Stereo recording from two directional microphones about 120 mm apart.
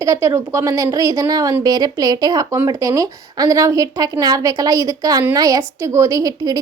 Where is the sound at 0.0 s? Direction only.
25° right (ahead or behind).